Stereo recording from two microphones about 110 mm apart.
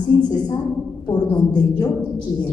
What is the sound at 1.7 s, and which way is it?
Speech, 35° left (ahead or behind).